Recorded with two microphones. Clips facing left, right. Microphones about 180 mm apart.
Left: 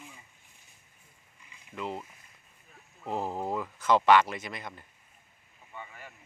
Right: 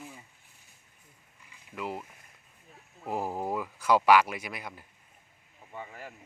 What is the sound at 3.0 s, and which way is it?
Speech, 10° right (ahead or behind).